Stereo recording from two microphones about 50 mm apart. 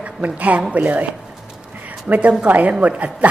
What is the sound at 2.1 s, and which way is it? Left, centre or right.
A woman's voice, right.